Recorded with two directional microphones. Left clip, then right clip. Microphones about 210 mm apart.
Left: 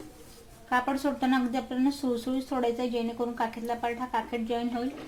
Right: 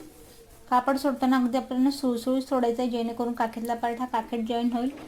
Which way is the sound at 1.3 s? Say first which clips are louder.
Right 3 dB; 40° right (ahead or behind).